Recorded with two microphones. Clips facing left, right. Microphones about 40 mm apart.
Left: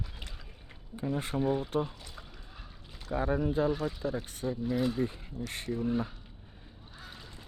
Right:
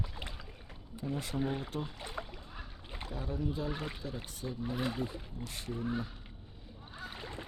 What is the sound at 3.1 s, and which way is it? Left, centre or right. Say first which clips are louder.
Speech: left 9 dB; left.